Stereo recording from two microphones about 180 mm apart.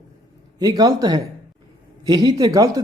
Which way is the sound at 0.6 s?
20° right (ahead or behind).